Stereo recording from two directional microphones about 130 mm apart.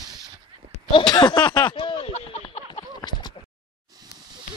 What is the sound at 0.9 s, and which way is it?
Speech, 35° left (ahead or behind).